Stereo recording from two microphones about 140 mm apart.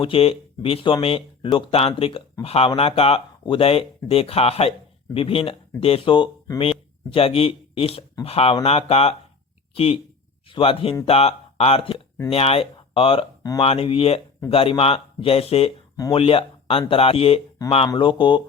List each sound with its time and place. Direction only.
0.0 s speech: 40° left (ahead or behind)